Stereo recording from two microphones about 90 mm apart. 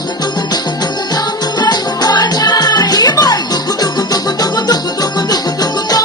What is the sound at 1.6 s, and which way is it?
Music, 45° left (ahead or behind).